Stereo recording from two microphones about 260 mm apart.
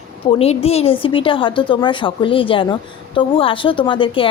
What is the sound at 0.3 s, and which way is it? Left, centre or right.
A woman's voice, left.